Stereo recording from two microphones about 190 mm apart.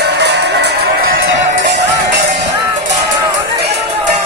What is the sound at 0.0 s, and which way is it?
Music, 60° right (ahead or behind).